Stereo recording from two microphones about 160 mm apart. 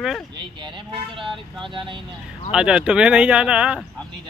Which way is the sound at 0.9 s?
35° right (ahead or behind).